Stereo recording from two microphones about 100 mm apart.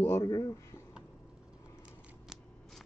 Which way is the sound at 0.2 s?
35° left (ahead or behind).